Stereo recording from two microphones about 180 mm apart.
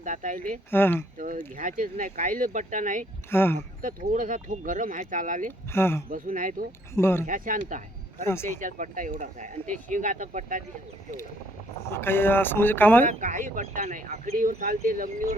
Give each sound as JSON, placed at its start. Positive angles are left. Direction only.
{"t": 0.0, "sound": "speech", "side_deg": -45}
{"t": 0.7, "sound": "speech", "side_deg": 10}
{"t": 1.2, "sound": "speech", "side_deg": -45}
{"t": 3.2, "sound": "speech", "side_deg": 15}
{"t": 3.8, "sound": "speech", "side_deg": -50}
{"t": 5.7, "sound": "speech", "side_deg": 15}
{"t": 6.1, "sound": "speech", "side_deg": -50}
{"t": 6.9, "sound": "speech", "side_deg": 15}
{"t": 7.3, "sound": "speech", "side_deg": -50}
{"t": 8.2, "sound": "speech", "side_deg": 15}
{"t": 8.4, "sound": "speech", "side_deg": -45}
{"t": 11.9, "sound": "speech", "side_deg": 15}
{"t": 13.1, "sound": "speech", "side_deg": -45}